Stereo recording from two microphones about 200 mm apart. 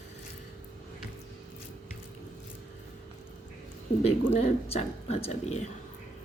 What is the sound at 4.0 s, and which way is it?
Speech, 35° left (ahead or behind).